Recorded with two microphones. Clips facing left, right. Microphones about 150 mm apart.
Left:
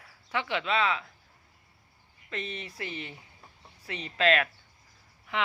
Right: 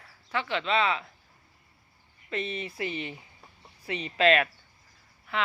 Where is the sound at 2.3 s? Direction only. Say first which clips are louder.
Right 4 dB; 5° right (ahead or behind).